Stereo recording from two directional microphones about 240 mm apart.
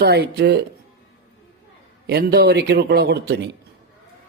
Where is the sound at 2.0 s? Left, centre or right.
Right.